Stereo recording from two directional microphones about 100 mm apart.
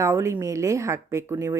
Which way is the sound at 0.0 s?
25° right (ahead or behind).